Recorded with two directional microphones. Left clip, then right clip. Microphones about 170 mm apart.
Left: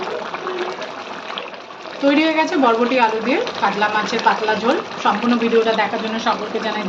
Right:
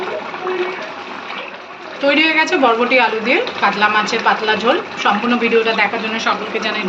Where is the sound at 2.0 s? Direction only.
55° left (ahead or behind).